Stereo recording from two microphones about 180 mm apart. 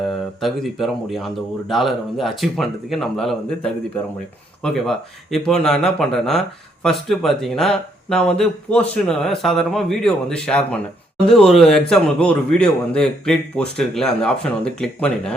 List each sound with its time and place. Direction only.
0.1 s speech: centre (ahead or behind)